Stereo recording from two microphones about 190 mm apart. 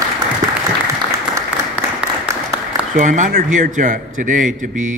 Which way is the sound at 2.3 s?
15° right (ahead or behind).